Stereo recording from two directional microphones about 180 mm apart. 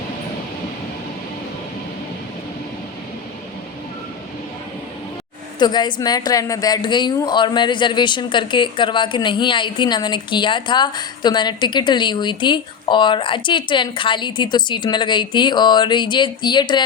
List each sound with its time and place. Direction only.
5.5 s a woman's voice: 25° left (ahead or behind)